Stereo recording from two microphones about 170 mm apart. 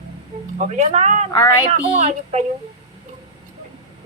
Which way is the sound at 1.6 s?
40° right (ahead or behind).